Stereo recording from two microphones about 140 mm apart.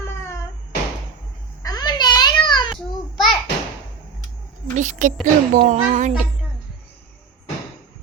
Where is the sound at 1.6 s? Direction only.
30° left (ahead or behind).